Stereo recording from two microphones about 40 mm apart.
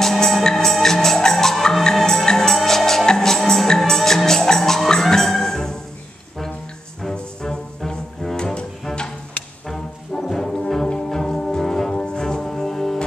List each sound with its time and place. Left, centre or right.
0.0 s music: centre
7.0 s music: centre
8.2 s cello: centre
9.7 s brass instrument: centre
11.1 s music: centre